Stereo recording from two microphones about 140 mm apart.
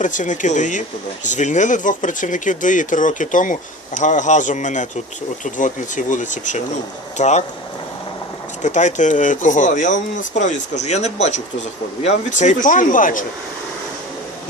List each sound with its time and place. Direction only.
0.0 s speech: 65° left (ahead or behind)
8.6 s speech: 60° left (ahead or behind)